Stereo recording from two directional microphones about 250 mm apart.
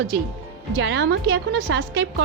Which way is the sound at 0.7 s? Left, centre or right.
Right.